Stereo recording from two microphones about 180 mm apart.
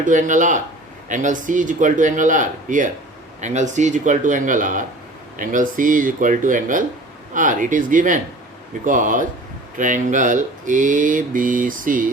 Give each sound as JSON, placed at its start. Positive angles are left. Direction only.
{"t": 0.0, "sound": "speech", "side_deg": -45}